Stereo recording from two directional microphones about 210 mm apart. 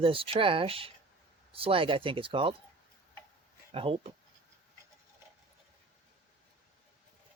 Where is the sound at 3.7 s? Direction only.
25° right (ahead or behind).